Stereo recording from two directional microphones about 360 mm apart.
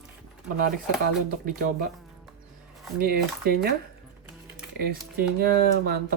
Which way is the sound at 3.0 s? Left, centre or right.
Right.